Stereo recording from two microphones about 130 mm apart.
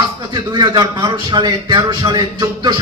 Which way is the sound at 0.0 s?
35° right (ahead or behind).